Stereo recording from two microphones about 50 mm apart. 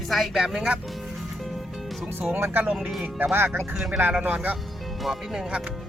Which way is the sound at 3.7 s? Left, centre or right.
Centre.